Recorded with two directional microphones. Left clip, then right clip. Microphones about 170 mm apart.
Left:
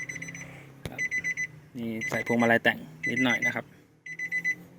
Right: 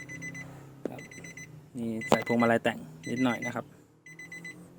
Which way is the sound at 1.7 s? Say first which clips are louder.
Right 6 dB; centre (ahead or behind).